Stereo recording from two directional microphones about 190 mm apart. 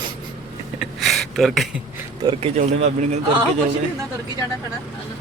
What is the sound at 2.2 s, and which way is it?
Speech, 20° right (ahead or behind).